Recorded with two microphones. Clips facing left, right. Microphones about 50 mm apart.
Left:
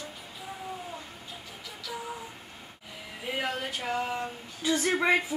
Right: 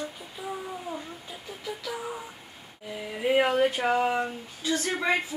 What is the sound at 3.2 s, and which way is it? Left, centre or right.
Speech, right.